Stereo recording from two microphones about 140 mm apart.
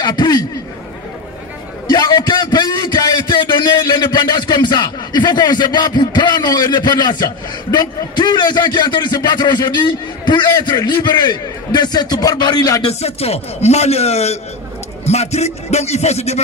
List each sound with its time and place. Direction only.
0.0 s a man's voice: 30° left (ahead or behind)
1.9 s a man's voice: 30° left (ahead or behind)
12.8 s a man's voice: 45° left (ahead or behind)